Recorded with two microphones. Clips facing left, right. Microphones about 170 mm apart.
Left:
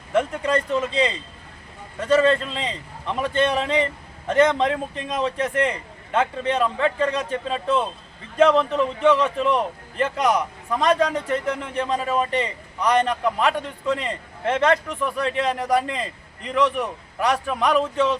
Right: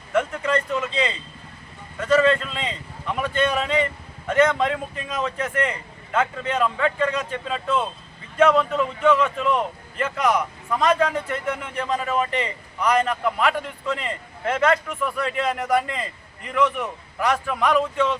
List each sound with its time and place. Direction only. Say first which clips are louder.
0.1 s a man's voice: left 1 dB; 35° left (ahead or behind)